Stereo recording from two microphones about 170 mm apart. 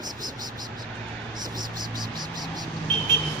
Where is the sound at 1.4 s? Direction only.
25° right (ahead or behind).